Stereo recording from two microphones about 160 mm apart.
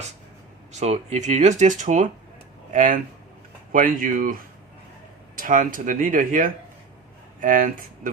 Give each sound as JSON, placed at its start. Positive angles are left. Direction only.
{"t": 0.7, "sound": "speech", "side_deg": -45}
{"t": 5.4, "sound": "speech", "side_deg": -55}